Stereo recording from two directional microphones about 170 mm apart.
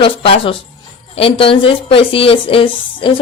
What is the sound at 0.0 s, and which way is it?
Speech, 35° left (ahead or behind).